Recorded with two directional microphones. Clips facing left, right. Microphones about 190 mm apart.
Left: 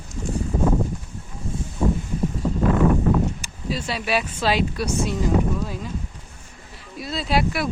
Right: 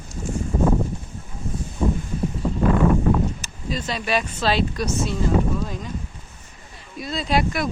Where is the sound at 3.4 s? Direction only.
10° left (ahead or behind).